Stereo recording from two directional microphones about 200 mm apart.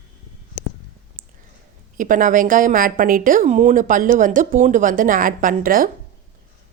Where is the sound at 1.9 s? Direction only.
40° right (ahead or behind).